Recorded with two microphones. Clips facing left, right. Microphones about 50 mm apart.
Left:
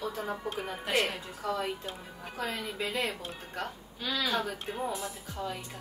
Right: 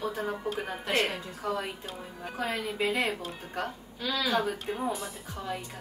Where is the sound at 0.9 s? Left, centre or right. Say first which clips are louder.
Right 1 dB; centre.